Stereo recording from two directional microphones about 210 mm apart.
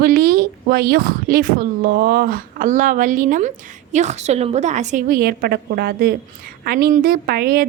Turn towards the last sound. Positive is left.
turn(degrees=-45)  # may be behind; listen again after turning